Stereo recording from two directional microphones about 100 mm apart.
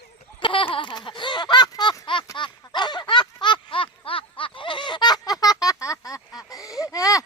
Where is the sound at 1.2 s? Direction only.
50° left (ahead or behind).